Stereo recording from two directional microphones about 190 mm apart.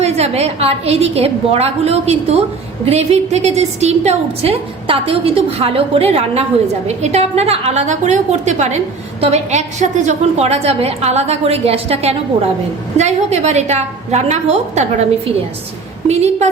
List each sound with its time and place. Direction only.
0.0 s a woman's voice: 35° right (ahead or behind)
16.0 s a woman's voice: 35° right (ahead or behind)